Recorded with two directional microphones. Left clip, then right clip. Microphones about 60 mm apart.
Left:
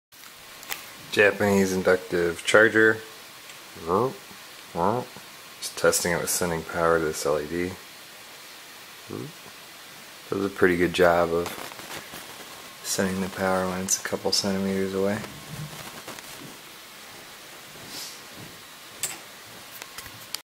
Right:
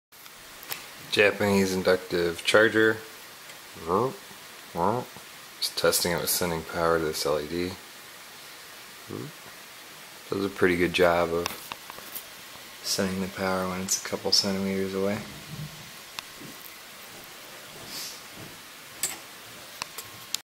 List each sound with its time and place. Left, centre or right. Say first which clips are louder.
1.1 s speech: left 2 dB; centre
10.3 s speech: left 2 dB; centre
13.0 s speech: left 5 dB; left